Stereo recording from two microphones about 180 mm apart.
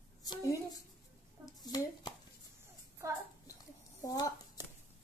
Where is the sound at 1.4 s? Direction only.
20° left (ahead or behind).